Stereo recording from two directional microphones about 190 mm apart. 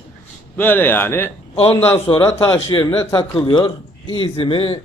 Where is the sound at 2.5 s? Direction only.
25° left (ahead or behind).